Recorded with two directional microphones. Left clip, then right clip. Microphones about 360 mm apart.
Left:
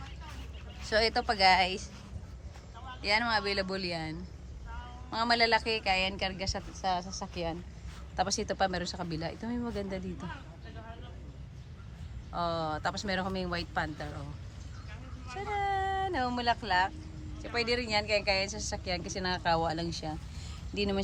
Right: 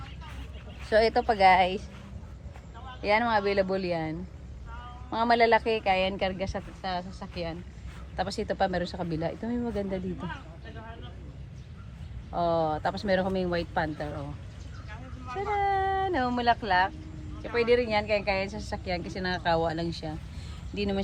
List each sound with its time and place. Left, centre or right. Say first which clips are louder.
0.9 s speech: right 5 dB; centre
3.0 s speech: right 4 dB; centre
12.3 s speech: right 6 dB; centre
15.4 s speech: right 5 dB; centre